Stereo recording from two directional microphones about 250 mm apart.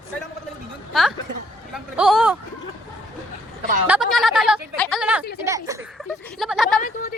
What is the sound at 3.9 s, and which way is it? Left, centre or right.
A woman's voice, centre.